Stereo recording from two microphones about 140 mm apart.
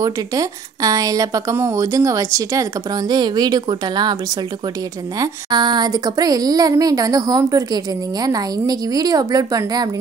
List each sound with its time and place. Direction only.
0.0 s a woman's voice: 25° right (ahead or behind)
5.2 s a woman's voice: 30° right (ahead or behind)